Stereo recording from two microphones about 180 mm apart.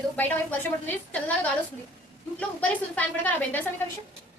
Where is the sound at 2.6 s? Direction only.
10° left (ahead or behind).